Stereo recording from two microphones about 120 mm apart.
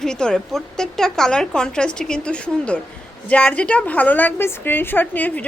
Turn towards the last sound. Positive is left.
turn(degrees=15)  # may be behind; listen again after turning